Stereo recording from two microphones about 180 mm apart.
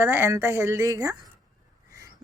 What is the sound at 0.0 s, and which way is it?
Speech, 10° right (ahead or behind).